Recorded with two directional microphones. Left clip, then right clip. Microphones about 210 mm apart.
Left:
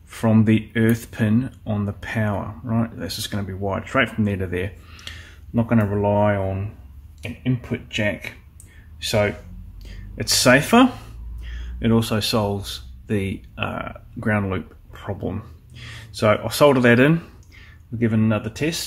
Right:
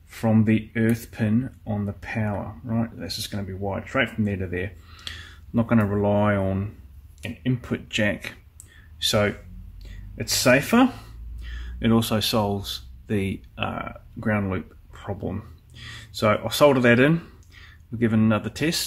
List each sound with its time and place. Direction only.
0.1 s speech: 5° left (ahead or behind)
4.9 s speech: 15° right (ahead or behind)
10.1 s speech: centre (ahead or behind)
11.4 s speech: 15° right (ahead or behind)
17.9 s speech: 15° right (ahead or behind)